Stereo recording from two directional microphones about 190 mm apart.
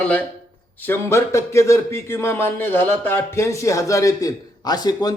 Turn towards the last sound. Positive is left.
turn(degrees=20)  # may be behind; listen again after turning